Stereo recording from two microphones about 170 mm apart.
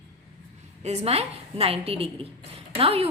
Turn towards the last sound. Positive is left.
turn(degrees=-35)  # may be behind; listen again after turning